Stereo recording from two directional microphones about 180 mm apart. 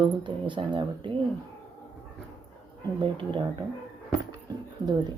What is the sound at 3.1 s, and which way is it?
Speech, 30° right (ahead or behind).